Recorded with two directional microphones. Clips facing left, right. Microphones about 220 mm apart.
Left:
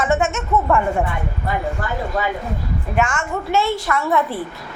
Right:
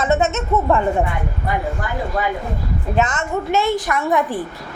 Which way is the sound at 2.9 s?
20° right (ahead or behind).